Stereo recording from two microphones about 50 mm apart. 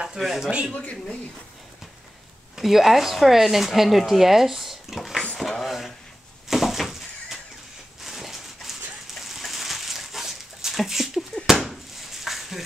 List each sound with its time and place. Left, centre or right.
0.2 s speech: centre
0.7 s speech: left
2.5 s speech: centre
5.6 s a sound: centre